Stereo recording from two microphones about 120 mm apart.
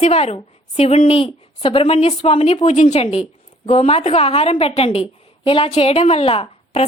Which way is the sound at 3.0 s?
60° left (ahead or behind).